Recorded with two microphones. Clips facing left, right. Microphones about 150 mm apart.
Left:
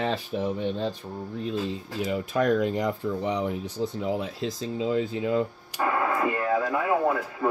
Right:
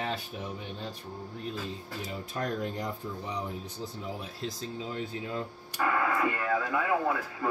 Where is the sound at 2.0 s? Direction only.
90° left.